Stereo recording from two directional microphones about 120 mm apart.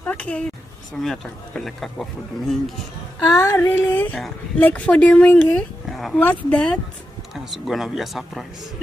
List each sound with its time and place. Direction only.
0.0 s a woman's voice: 10° left (ahead or behind)
3.4 s speech: 20° left (ahead or behind)
7.3 s a man's voice: centre (ahead or behind)